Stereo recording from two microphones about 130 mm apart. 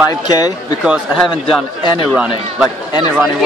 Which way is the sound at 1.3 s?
35° left (ahead or behind).